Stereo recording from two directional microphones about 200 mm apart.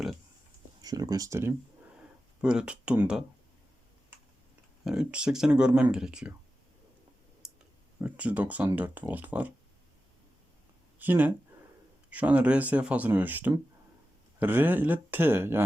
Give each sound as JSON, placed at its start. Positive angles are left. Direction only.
{"t": 0.8, "sound": "speech", "side_deg": -20}
{"t": 4.8, "sound": "speech", "side_deg": -5}
{"t": 7.4, "sound": "clicking", "side_deg": 0}
{"t": 8.0, "sound": "speech", "side_deg": -5}
{"t": 11.0, "sound": "speech", "side_deg": -10}